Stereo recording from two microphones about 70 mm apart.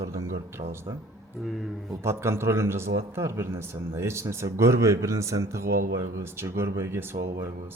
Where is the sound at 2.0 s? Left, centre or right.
Right.